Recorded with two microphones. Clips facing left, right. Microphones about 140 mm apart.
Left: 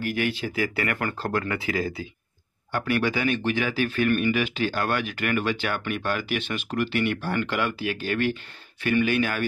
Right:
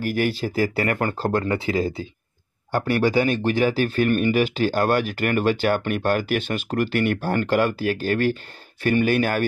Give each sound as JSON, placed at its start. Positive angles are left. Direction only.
{"t": 0.0, "sound": "speech", "side_deg": -40}